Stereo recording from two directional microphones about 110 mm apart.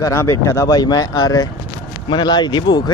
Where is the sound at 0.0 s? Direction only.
25° left (ahead or behind).